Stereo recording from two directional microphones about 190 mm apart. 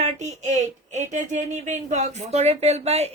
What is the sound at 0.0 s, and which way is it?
Speech, 40° right (ahead or behind).